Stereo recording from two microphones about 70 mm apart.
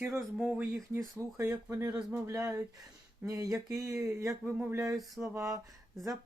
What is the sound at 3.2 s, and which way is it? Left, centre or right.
Speech, right.